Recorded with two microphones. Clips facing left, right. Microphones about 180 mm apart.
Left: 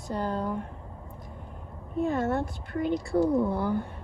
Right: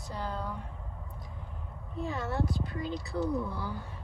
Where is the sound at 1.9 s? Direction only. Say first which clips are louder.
Left 7 dB; 55° left (ahead or behind).